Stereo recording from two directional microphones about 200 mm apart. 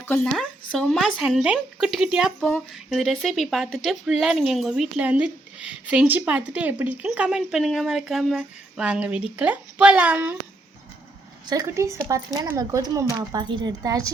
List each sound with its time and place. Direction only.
0.1 s speech: centre (ahead or behind)
11.4 s speech: 15° right (ahead or behind)